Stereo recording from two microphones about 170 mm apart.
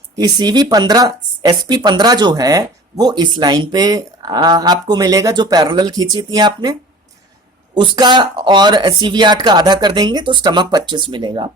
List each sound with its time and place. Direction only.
0.2 s speech: 25° right (ahead or behind)
7.8 s speech: 25° right (ahead or behind)